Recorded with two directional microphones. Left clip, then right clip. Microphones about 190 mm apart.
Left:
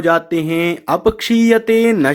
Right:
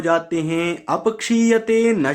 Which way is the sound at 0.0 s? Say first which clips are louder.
Left 4 dB; 30° left (ahead or behind).